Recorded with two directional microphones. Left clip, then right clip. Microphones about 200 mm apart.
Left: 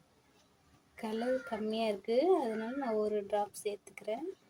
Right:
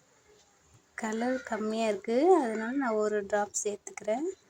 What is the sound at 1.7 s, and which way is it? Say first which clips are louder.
A woman's voice: right 3 dB; 10° right (ahead or behind).